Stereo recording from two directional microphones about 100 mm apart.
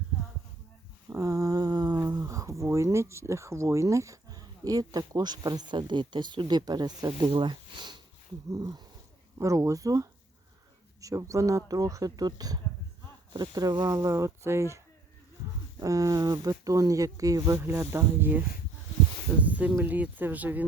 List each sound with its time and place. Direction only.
1.1 s humming: 35° right (ahead or behind)
2.0 s speech: 35° right (ahead or behind)
7.3 s speech: 55° right (ahead or behind)
8.4 s speech: 40° right (ahead or behind)
15.8 s speech: 35° right (ahead or behind); by 20.7 s 15° right (ahead or behind)